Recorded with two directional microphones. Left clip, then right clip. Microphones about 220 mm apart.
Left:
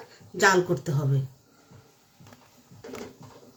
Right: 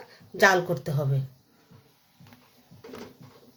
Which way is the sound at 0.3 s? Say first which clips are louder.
Even; 40° right (ahead or behind).